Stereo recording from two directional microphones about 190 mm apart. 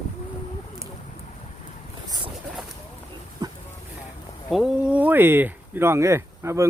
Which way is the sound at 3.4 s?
20° right (ahead or behind).